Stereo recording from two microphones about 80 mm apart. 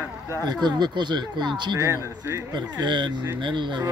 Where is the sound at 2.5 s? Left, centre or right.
Right.